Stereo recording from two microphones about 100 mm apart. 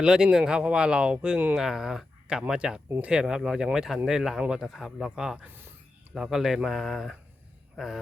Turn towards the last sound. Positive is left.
turn(degrees=0)  # may be behind; listen again after turning